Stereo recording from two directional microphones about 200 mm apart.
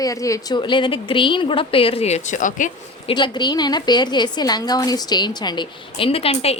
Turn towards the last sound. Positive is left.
turn(degrees=30)  # may be behind; listen again after turning